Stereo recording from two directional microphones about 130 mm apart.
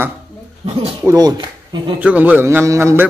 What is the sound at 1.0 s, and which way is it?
Speech, 25° right (ahead or behind).